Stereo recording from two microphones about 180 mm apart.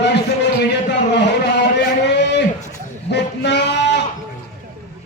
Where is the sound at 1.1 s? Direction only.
70° left (ahead or behind).